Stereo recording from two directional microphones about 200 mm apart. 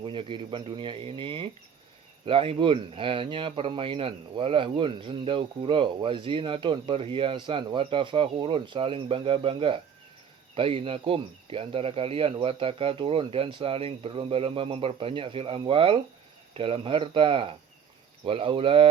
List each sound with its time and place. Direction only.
0.0 s speech: 25° right (ahead or behind)